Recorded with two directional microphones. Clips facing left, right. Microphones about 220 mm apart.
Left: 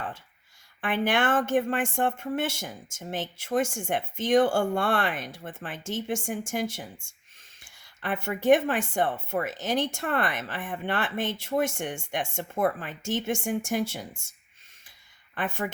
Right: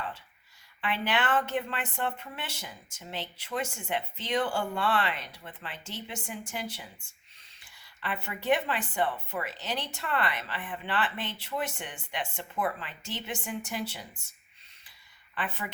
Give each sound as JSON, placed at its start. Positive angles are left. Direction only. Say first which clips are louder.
{"t": 0.8, "sound": "speech", "louder": "left 5 dB", "side_deg": 50}
{"t": 15.4, "sound": "speech", "louder": "left 6 dB", "side_deg": 45}